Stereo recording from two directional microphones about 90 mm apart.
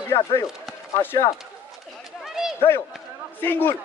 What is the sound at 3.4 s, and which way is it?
Speech, 25° left (ahead or behind).